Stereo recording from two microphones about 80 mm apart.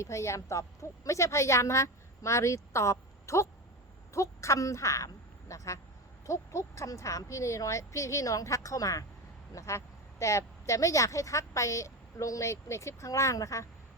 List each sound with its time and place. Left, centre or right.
0.0 s a woman's voice: left